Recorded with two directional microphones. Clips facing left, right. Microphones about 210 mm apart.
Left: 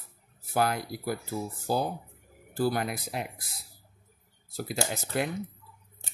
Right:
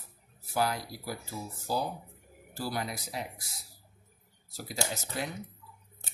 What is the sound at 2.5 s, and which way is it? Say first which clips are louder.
Speech: left 7 dB; 55° left (ahead or behind).